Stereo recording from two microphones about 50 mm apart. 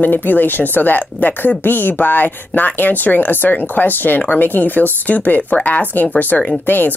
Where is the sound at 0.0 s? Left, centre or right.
Left.